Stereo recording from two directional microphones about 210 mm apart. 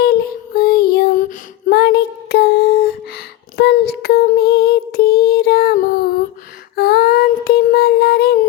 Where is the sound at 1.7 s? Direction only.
50° left (ahead or behind).